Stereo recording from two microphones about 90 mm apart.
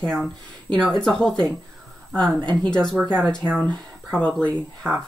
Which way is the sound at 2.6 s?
10° left (ahead or behind).